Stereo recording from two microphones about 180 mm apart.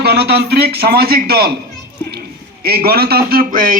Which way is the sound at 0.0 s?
65° right (ahead or behind).